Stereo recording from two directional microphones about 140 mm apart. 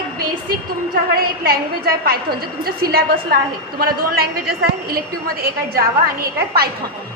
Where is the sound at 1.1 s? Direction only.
90° right.